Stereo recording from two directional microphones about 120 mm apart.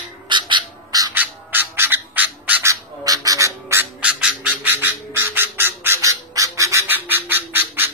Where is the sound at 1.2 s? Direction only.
15° right (ahead or behind).